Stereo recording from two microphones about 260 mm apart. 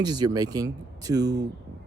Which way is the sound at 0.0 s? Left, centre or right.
Centre.